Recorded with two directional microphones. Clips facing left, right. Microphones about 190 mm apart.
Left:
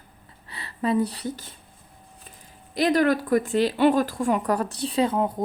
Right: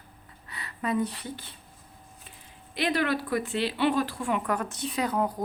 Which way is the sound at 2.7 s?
40° left (ahead or behind).